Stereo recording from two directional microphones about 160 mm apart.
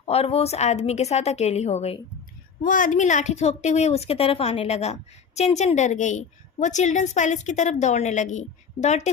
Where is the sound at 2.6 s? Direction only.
55° left (ahead or behind).